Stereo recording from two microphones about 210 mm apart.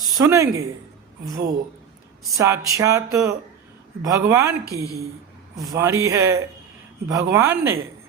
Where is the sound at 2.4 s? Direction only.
15° right (ahead or behind).